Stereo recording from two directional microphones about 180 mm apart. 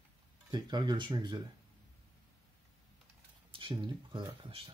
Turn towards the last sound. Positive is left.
turn(degrees=-30)  # may be behind; listen again after turning